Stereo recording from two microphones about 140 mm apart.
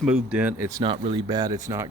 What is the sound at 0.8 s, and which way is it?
Speech, 35° right (ahead or behind).